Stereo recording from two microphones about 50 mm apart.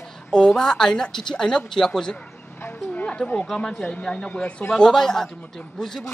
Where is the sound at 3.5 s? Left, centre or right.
Centre.